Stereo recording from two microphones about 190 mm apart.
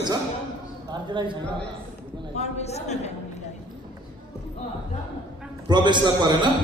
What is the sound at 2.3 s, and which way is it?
Speech, 35° left (ahead or behind).